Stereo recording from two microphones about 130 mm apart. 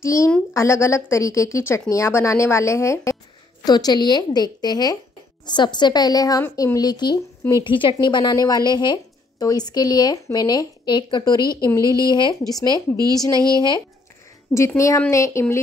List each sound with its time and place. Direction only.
0.0 s a woman's voice: 25° left (ahead or behind)
11.4 s speech: 25° right (ahead or behind)
12.1 s speech: 35° left (ahead or behind)
12.9 s speech: 30° right (ahead or behind)
13.6 s speech: 35° left (ahead or behind)
14.8 s a woman's voice: 25° left (ahead or behind)